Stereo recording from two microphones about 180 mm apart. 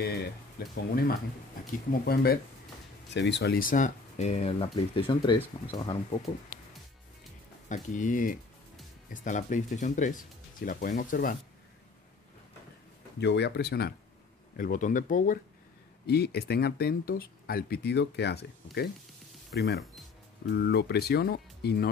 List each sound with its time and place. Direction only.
0.0 s speech: 65° left (ahead or behind)
3.1 s speech: 75° left (ahead or behind); by 6.3 s 25° left (ahead or behind)
7.6 s speech: 45° left (ahead or behind)
13.2 s speech: 70° left (ahead or behind)
14.6 s speech: 45° left (ahead or behind)
16.1 s speech: 65° left (ahead or behind)